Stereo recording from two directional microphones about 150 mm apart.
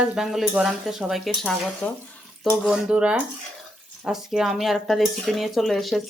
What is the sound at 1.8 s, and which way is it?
Speech, 10° left (ahead or behind).